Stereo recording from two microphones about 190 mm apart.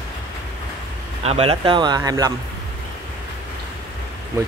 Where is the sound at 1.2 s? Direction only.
30° right (ahead or behind).